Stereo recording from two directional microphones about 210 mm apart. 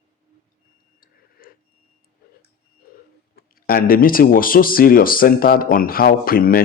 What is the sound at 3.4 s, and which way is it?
Speech, 45° left (ahead or behind).